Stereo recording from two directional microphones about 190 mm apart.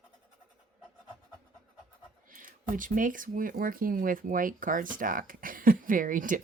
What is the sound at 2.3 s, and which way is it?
Speech, 45° right (ahead or behind).